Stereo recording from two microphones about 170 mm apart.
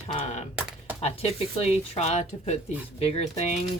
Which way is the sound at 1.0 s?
35° left (ahead or behind).